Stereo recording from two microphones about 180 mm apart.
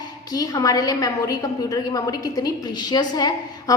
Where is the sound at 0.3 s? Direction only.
20° left (ahead or behind).